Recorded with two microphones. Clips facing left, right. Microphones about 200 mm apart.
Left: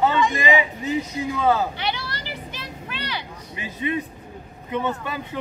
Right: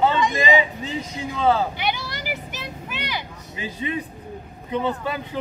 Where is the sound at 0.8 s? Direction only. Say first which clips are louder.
Left 4 dB; 25° right (ahead or behind).